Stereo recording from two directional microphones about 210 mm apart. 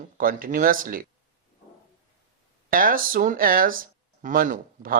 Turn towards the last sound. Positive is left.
turn(degrees=-40)  # may be behind; listen again after turning